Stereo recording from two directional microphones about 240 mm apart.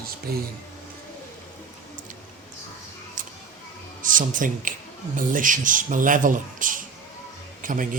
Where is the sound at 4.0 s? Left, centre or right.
Right.